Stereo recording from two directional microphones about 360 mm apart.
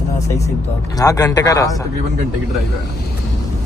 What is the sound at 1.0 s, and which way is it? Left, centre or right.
Speech, centre.